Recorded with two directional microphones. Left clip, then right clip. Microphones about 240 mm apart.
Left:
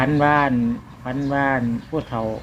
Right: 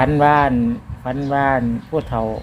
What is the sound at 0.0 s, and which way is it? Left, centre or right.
Speech, right.